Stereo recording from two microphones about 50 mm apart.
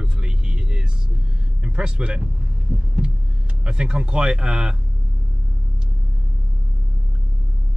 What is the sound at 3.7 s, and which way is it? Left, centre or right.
Speech, centre.